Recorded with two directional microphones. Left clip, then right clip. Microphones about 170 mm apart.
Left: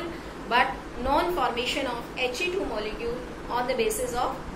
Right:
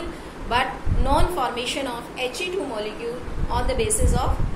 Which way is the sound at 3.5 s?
15° right (ahead or behind).